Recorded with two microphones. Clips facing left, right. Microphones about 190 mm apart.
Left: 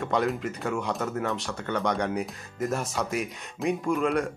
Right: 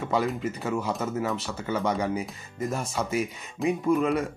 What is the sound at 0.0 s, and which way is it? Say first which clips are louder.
Speech: even; centre (ahead or behind).